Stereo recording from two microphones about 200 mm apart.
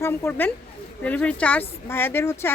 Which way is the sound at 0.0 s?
10° left (ahead or behind).